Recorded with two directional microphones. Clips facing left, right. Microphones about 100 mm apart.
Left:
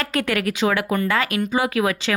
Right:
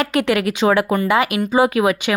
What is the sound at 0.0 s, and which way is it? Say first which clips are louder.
A woman's voice: right 5 dB; 20° right (ahead or behind).